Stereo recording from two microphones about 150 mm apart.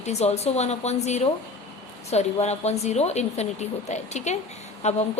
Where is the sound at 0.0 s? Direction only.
45° left (ahead or behind).